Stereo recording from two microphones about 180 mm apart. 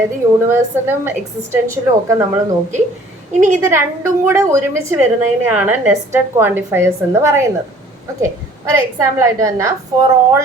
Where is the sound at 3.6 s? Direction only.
15° right (ahead or behind).